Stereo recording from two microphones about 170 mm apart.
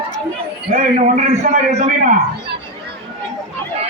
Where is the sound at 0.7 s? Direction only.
45° right (ahead or behind).